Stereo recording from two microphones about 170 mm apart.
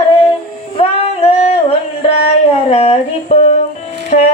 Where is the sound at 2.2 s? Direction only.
35° left (ahead or behind).